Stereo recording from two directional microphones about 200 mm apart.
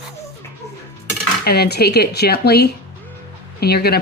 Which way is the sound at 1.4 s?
50° left (ahead or behind).